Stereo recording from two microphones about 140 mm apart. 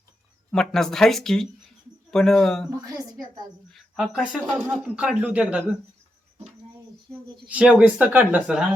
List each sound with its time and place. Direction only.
0.5 s speech: 5° left (ahead or behind)
3.7 s speech: centre (ahead or behind)
7.4 s speech: 10° right (ahead or behind)